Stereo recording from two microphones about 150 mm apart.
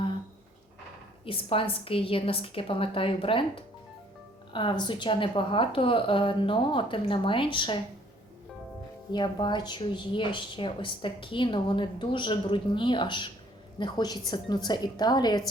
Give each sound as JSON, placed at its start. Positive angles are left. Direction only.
{"t": 1.2, "sound": "a woman's voice", "side_deg": 35}
{"t": 9.1, "sound": "a woman's voice", "side_deg": 30}